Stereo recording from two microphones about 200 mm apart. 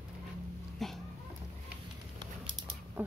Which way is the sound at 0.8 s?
Centre (ahead or behind).